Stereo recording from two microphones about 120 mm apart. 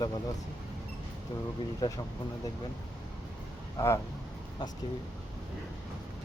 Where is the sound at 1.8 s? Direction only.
35° left (ahead or behind).